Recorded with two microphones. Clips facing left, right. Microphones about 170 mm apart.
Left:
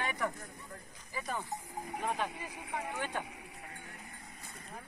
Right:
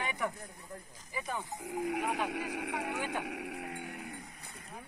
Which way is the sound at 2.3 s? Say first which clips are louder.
Right 5 dB; 80° right.